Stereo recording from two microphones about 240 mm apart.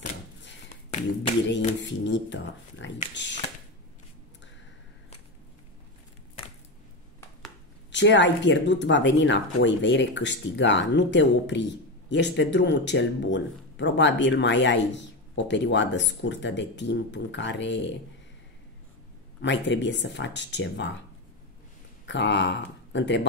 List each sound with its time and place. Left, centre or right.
1.8 s speech: left
7.9 s speech: left
19.4 s speech: left
22.0 s speech: left